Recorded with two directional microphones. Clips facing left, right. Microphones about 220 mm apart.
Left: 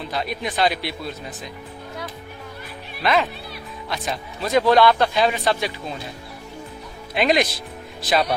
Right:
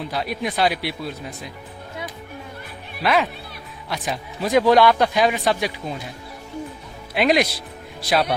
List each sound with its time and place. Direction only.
0.1 s a man's voice: 10° right (ahead or behind)
3.0 s a man's voice: 10° right (ahead or behind)
7.1 s a man's voice: 10° right (ahead or behind)